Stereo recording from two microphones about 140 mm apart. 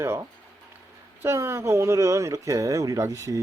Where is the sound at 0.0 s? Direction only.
20° right (ahead or behind).